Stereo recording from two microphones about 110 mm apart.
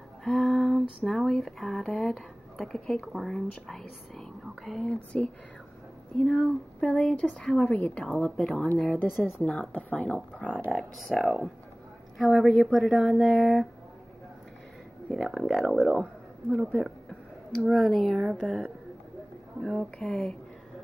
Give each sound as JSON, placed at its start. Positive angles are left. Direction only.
{"t": 0.2, "sound": "speech", "side_deg": 0}
{"t": 8.9, "sound": "speech", "side_deg": 20}
{"t": 9.4, "sound": "speech", "side_deg": 5}
{"t": 15.0, "sound": "speech", "side_deg": 0}